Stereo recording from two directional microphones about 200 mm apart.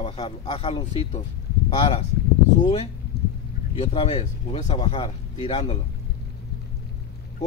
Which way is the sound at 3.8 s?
25° left (ahead or behind).